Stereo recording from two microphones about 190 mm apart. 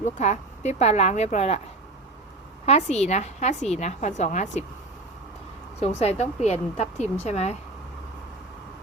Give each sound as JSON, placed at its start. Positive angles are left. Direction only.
{"t": 0.0, "sound": "a woman's voice", "side_deg": 35}
{"t": 2.6, "sound": "a woman's voice", "side_deg": 35}
{"t": 5.8, "sound": "a woman's voice", "side_deg": 35}